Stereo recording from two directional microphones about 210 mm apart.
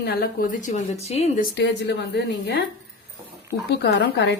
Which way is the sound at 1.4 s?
50° left (ahead or behind).